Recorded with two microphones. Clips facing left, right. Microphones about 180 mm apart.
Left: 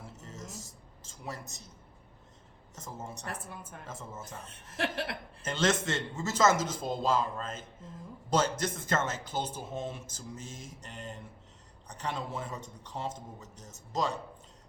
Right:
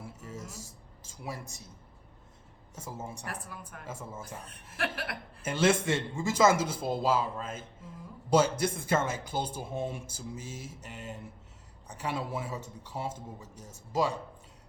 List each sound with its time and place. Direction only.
0.0 s a sound: 10° right (ahead or behind)
2.7 s speech: 10° right (ahead or behind)
3.2 s speech: 25° left (ahead or behind)
3.8 s speech: 10° right (ahead or behind)
4.8 s speech: 25° left (ahead or behind)
5.4 s speech: 10° right (ahead or behind)